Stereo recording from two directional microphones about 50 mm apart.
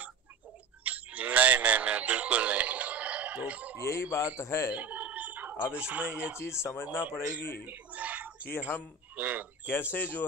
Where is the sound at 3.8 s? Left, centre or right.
Left.